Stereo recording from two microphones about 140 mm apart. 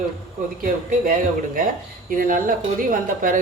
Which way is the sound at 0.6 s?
90° right.